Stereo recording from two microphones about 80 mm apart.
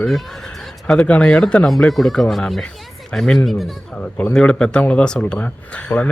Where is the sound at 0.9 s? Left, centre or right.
Centre.